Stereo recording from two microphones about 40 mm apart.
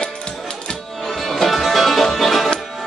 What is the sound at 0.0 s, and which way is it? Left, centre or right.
Music, left.